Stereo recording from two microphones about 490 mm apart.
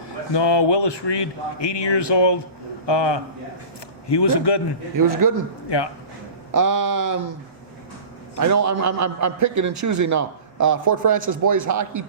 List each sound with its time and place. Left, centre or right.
0.3 s speech: left
4.9 s a man's voice: right
5.6 s speech: left
6.5 s a man's voice: right
8.4 s a man's voice: right